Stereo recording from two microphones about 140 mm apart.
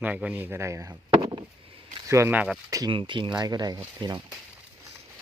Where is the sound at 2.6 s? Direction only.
25° right (ahead or behind).